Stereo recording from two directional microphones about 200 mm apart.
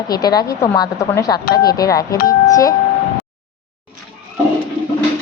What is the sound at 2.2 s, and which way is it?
Doorbell, 45° left (ahead or behind).